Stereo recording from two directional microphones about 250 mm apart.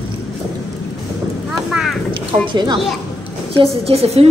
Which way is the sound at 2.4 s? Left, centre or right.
Centre.